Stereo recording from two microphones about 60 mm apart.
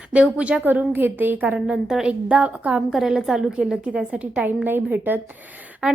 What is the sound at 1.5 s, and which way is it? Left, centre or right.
Speech, centre.